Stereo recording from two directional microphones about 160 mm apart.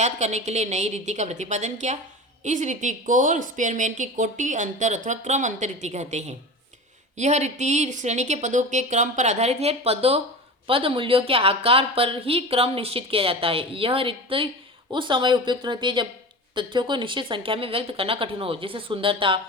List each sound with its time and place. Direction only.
0.0 s a woman's voice: 45° right (ahead or behind)